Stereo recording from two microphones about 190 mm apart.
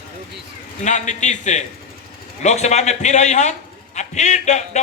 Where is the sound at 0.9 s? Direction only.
40° left (ahead or behind).